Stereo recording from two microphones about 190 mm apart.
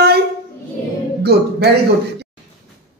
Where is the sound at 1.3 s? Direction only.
55° right (ahead or behind).